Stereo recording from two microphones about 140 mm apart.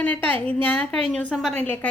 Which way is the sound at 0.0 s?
10° left (ahead or behind).